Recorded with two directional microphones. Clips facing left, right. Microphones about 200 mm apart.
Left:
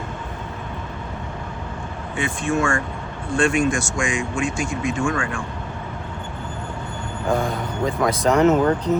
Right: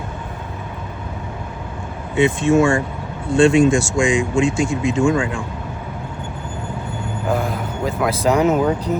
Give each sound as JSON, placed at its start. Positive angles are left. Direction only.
{"t": 2.1, "sound": "speech", "side_deg": -20}
{"t": 7.3, "sound": "speech", "side_deg": -5}